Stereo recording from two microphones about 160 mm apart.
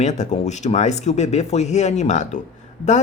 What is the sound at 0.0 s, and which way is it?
Speech, 45° left (ahead or behind).